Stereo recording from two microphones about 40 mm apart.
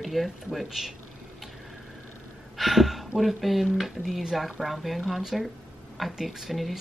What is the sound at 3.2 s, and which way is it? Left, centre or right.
A woman's voice, centre.